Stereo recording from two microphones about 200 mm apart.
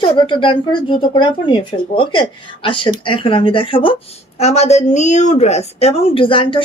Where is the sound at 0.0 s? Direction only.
25° left (ahead or behind).